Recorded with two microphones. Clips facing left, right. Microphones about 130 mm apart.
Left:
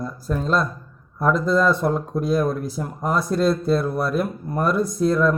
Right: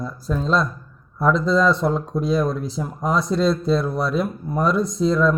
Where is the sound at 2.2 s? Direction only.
50° left (ahead or behind).